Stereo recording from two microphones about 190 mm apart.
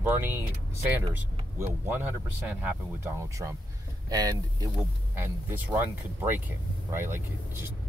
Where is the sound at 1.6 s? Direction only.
10° right (ahead or behind).